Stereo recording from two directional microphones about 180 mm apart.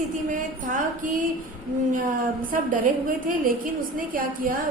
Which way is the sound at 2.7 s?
50° right (ahead or behind).